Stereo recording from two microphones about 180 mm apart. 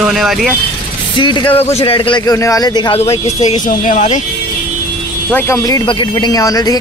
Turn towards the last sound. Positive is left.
turn(degrees=20)  # may be behind; listen again after turning